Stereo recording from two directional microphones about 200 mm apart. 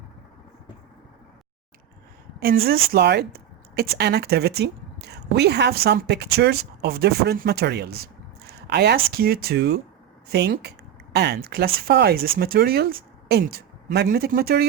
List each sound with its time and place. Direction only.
2.9 s speech: 55° right (ahead or behind)